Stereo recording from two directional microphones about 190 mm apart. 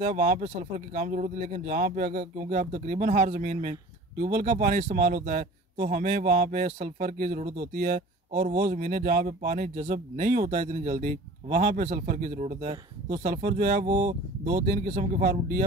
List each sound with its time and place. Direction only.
0.0 s a man's voice: 45° right (ahead or behind)
13.1 s a man's voice: 50° right (ahead or behind)